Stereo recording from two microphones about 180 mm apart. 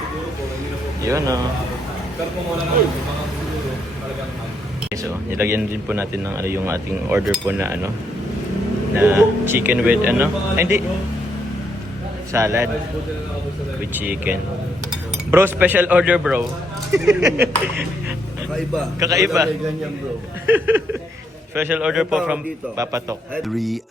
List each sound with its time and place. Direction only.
1.0 s a man's voice: 20° right (ahead or behind)
5.4 s a man's voice: 10° right (ahead or behind)
9.0 s a man's voice: 10° right (ahead or behind)
12.3 s a man's voice: 15° right (ahead or behind)
14.0 s a man's voice: 10° right (ahead or behind)
18.9 s a man's voice: 15° right (ahead or behind)
20.5 s a man's voice: 10° right (ahead or behind)
22.8 s a man's voice: 15° right (ahead or behind)